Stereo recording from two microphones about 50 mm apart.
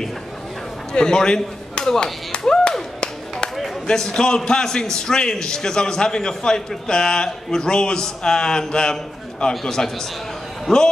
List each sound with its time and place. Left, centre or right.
0.9 s speech: centre
2.3 s a sound: centre
3.8 s a man's voice: centre